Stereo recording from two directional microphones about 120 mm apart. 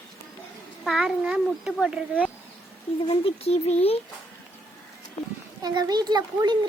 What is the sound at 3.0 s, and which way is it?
Speech, 50° left (ahead or behind).